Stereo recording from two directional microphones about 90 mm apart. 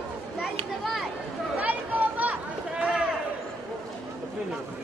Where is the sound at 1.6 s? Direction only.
20° right (ahead or behind).